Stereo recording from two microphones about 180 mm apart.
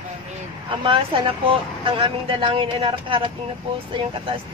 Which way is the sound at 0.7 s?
30° right (ahead or behind).